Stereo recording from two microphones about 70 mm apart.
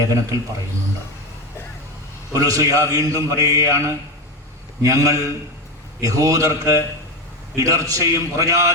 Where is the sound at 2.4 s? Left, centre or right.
Right.